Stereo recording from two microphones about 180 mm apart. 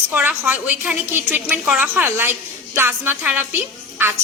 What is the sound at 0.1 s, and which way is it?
A woman's voice, 10° right (ahead or behind).